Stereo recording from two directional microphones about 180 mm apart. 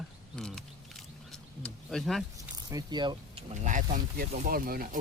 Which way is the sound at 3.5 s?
40° right (ahead or behind).